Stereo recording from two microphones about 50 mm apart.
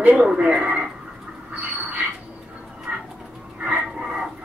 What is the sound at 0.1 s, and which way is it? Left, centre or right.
Speech, centre.